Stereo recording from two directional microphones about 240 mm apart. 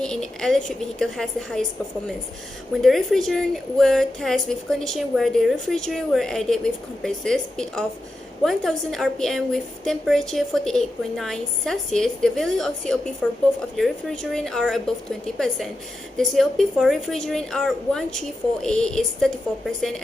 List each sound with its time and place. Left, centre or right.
0.0 s a woman's voice: centre
2.7 s a woman's voice: centre